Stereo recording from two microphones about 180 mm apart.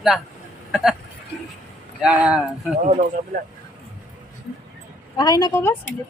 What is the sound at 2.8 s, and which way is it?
Speech, 40° right (ahead or behind).